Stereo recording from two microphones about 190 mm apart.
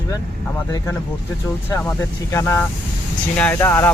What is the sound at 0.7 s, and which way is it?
Speech, 15° left (ahead or behind).